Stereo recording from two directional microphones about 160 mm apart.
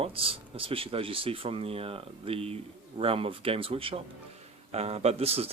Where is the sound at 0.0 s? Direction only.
35° right (ahead or behind).